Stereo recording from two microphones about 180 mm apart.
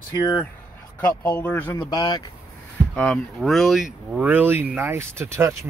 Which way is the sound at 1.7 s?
25° left (ahead or behind).